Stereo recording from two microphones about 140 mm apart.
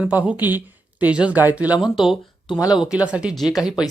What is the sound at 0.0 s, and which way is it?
Speech, 10° right (ahead or behind).